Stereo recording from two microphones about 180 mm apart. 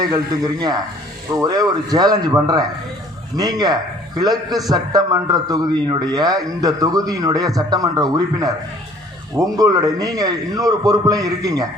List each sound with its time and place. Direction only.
0.0 s a man's voice: 20° right (ahead or behind)
3.3 s a man's voice: 20° right (ahead or behind)